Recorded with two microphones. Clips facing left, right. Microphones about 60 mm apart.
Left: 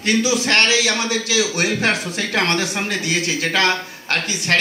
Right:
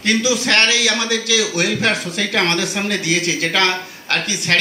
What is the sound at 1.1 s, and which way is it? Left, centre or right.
Speech, left.